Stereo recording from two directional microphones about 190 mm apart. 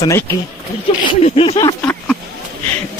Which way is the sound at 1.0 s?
30° left (ahead or behind).